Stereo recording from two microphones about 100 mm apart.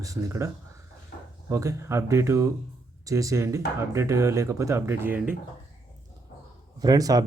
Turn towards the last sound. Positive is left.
turn(degrees=-40)  # may be behind; listen again after turning